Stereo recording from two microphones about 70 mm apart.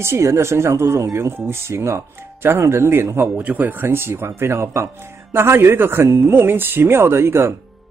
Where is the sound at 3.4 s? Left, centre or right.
Right.